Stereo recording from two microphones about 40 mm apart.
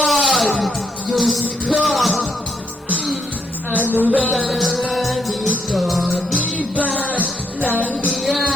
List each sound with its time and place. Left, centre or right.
0.0 s music: centre
4.0 s music: right
4.3 s music: centre
8.1 s music: centre